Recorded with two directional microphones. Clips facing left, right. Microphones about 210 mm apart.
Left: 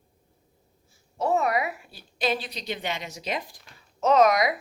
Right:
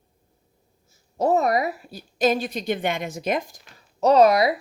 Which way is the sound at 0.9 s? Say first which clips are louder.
Right 4 dB; 40° right (ahead or behind).